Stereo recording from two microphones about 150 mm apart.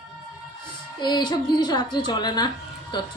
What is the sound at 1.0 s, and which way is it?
A woman's voice, 30° left (ahead or behind).